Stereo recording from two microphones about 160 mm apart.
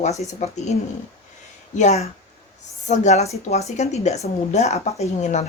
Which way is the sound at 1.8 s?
45° left (ahead or behind).